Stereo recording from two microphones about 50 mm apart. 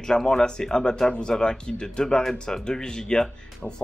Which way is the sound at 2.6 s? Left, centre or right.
Centre.